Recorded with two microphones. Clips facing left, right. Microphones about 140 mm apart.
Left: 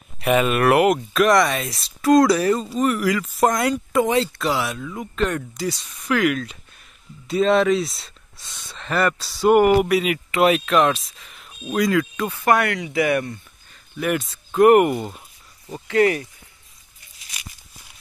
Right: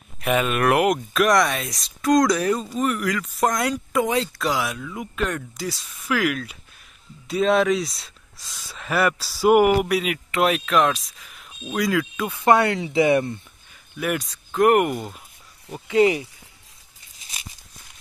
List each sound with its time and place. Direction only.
0.2 s speech: centre (ahead or behind)
12.3 s speech: 20° right (ahead or behind)
13.9 s speech: centre (ahead or behind)
15.7 s speech: 15° right (ahead or behind)